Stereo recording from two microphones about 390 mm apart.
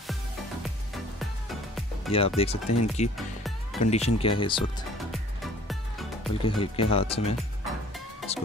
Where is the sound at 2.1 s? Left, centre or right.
Centre.